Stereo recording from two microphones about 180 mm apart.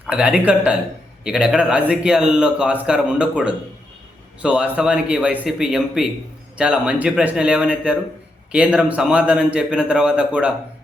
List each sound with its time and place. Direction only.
0.1 s a man's voice: 5° right (ahead or behind)